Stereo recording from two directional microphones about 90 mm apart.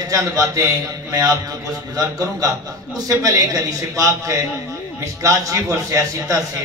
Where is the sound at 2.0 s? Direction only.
40° right (ahead or behind).